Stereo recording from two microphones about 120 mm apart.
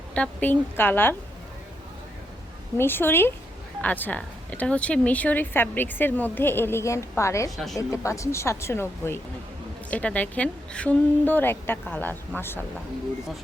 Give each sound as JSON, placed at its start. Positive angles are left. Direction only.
{"t": 0.1, "sound": "speech", "side_deg": 10}
{"t": 2.7, "sound": "speech", "side_deg": 20}
{"t": 7.5, "sound": "a woman's voice", "side_deg": 0}
{"t": 7.8, "sound": "speech", "side_deg": 25}